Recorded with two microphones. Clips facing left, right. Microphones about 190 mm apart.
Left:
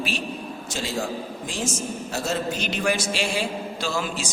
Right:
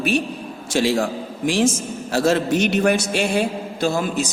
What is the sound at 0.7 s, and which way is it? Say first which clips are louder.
A man's voice: right 9 dB; 85° right.